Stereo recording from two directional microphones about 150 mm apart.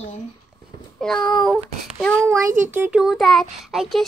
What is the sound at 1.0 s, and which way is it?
Child singing, 5° left (ahead or behind).